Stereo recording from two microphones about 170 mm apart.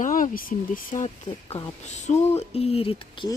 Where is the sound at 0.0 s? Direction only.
55° left (ahead or behind); by 3.2 s 35° left (ahead or behind).